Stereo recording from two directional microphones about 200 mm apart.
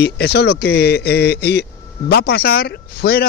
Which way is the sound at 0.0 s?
55° left (ahead or behind).